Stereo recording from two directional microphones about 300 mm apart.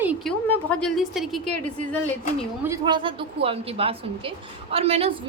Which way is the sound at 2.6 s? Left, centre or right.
Centre.